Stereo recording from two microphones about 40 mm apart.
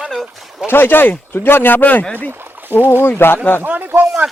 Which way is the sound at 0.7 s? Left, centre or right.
Left.